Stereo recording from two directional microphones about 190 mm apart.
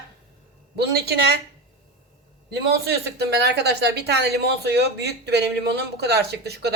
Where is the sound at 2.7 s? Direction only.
60° right (ahead or behind).